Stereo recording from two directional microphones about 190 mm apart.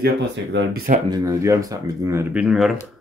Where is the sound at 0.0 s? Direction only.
65° right (ahead or behind).